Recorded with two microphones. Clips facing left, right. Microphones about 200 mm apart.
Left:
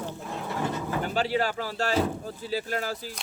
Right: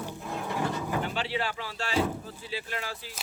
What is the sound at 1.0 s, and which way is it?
Speech, 40° left (ahead or behind).